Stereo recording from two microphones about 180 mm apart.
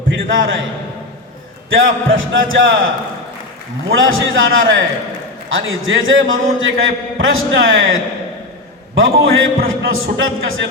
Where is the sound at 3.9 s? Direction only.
90° right.